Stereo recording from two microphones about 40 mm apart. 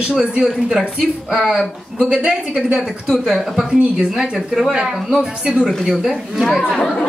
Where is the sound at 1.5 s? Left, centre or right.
Centre.